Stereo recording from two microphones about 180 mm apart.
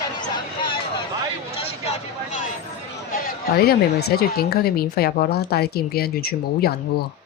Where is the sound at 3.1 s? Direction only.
60° left (ahead or behind).